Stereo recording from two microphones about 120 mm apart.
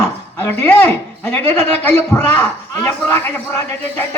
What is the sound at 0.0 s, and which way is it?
A man's voice, 20° left (ahead or behind).